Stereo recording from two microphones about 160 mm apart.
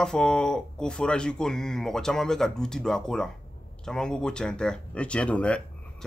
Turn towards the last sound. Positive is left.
turn(degrees=5)  # may be behind; listen again after turning